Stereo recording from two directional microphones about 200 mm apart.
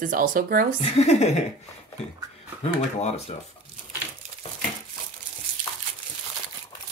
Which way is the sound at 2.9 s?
30° left (ahead or behind).